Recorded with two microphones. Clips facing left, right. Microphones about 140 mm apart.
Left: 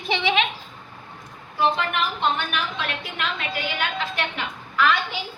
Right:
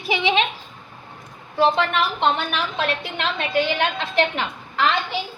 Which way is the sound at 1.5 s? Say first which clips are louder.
Right 4 dB; 90° right.